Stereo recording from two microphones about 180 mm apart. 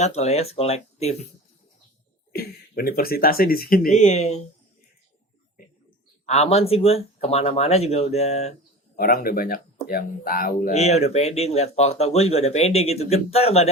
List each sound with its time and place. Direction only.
0.0 s speech: 35° left (ahead or behind)
2.3 s speech: 55° left (ahead or behind)
3.9 s speech: 40° left (ahead or behind)
6.2 s speech: 35° left (ahead or behind)
9.0 s speech: 55° left (ahead or behind)
10.7 s speech: 35° left (ahead or behind)